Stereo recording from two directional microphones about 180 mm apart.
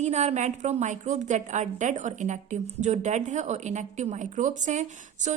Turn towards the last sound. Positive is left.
turn(degrees=-40)  # may be behind; listen again after turning